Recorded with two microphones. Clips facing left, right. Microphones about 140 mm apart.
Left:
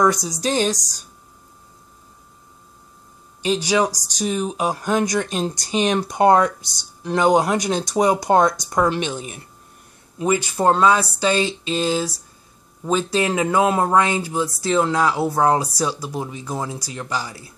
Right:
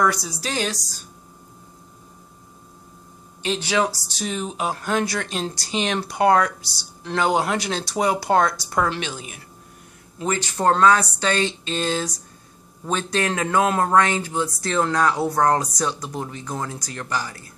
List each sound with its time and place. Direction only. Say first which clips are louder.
0.0 s speech: left 4 dB; 20° left (ahead or behind)
3.4 s speech: left 3 dB; 15° left (ahead or behind)